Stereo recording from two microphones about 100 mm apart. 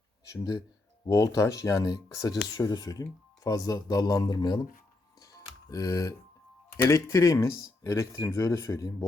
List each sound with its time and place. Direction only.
1.0 s speech: 35° left (ahead or behind)
5.7 s speech: 35° left (ahead or behind)